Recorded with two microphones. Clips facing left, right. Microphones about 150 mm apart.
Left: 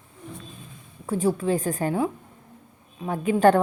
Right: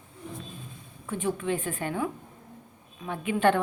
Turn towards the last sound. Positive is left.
turn(degrees=40)  # may be behind; listen again after turning